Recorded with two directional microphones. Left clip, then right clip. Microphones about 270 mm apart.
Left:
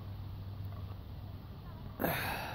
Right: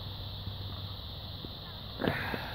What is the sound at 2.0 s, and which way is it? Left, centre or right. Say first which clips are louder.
Wheeze: right 2 dB; centre.